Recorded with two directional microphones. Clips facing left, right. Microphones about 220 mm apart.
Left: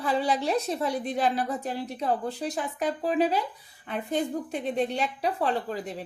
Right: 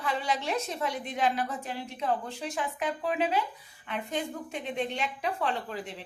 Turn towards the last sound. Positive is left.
turn(degrees=40)  # may be behind; listen again after turning